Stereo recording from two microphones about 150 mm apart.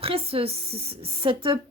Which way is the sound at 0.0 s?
40° right (ahead or behind).